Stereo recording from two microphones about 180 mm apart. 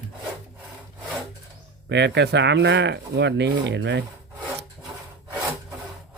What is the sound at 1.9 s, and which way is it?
Speech, 75° right (ahead or behind).